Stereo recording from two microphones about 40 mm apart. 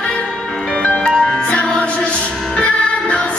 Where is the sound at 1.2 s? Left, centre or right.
Left.